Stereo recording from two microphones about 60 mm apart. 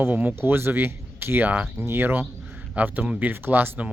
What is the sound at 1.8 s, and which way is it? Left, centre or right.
Speech, right.